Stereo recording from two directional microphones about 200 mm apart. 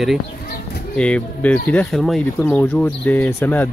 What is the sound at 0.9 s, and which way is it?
Speech, 5° left (ahead or behind).